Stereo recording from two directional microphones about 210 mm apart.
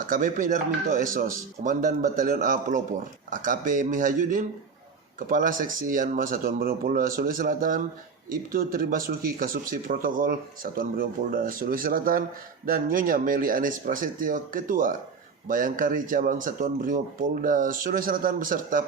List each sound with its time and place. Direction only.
0.0 s speech: 40° right (ahead or behind)